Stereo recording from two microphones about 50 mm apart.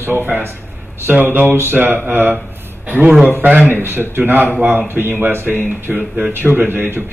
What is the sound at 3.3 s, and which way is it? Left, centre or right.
A man's voice, right.